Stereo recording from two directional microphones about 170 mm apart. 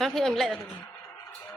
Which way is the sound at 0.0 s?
Centre (ahead or behind).